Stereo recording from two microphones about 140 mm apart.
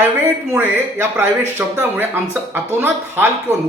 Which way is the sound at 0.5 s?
15° right (ahead or behind).